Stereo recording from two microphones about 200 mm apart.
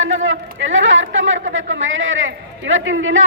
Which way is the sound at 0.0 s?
75° right (ahead or behind).